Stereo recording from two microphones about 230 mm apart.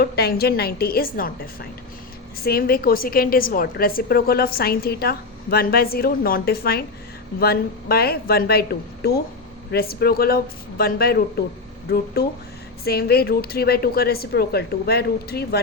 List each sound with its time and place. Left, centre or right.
0.0 s a woman's voice: left
12.8 s a woman's voice: left